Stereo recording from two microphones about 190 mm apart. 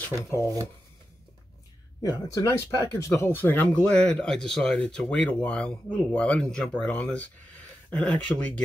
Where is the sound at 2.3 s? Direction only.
15° left (ahead or behind).